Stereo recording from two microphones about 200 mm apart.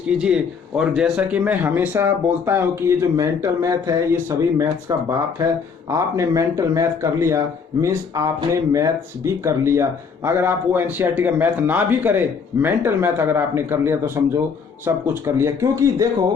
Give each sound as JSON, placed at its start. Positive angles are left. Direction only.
{"t": 0.1, "sound": "speech", "side_deg": -5}